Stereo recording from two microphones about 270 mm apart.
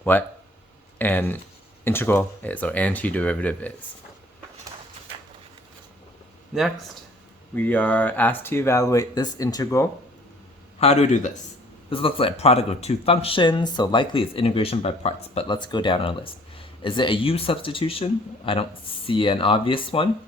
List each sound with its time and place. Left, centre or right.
0.0 s speech: centre
6.5 s speech: centre
10.8 s speech: left